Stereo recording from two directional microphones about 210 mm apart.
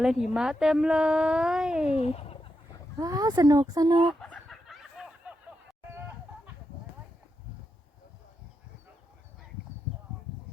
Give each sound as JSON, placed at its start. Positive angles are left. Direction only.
{"t": 0.0, "sound": "speech", "side_deg": 0}
{"t": 1.9, "sound": "speech", "side_deg": 30}
{"t": 3.0, "sound": "speech", "side_deg": -15}
{"t": 4.0, "sound": "fowl", "side_deg": 0}